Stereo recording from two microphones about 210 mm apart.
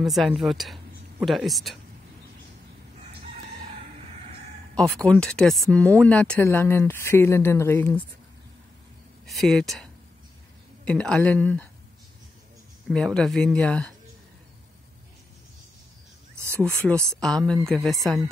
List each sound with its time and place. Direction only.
0.0 s speech: centre (ahead or behind)
3.0 s chicken: 30° right (ahead or behind)
4.7 s speech: 5° left (ahead or behind)
9.2 s speech: centre (ahead or behind)
10.9 s speech: 5° left (ahead or behind)
12.8 s speech: 5° left (ahead or behind)
16.6 s speech: 5° left (ahead or behind)